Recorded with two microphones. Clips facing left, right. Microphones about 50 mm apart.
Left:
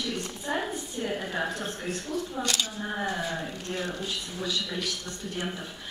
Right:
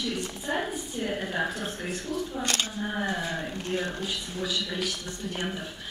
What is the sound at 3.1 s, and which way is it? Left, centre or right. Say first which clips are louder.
A woman's voice: right 1 dB; centre.